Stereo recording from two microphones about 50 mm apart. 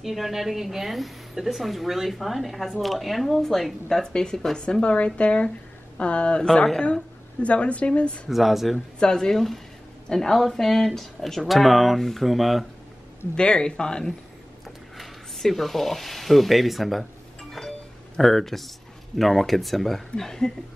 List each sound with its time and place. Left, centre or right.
0.0 s speech: centre
7.4 s speech: left
8.3 s speech: centre
8.7 s speech: centre
13.4 s speech: centre
15.0 s speech: centre
17.5 s a sound: centre
18.1 s speech: centre